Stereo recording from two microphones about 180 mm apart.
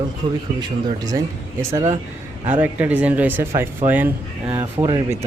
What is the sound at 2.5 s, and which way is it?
Speech, 10° right (ahead or behind).